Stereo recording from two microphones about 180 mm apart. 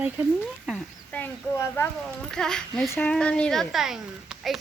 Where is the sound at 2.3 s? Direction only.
5° left (ahead or behind).